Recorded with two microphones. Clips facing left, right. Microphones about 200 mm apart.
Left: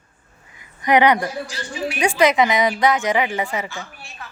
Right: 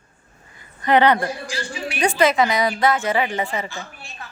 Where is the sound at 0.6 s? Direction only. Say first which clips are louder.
Even; 15° left (ahead or behind).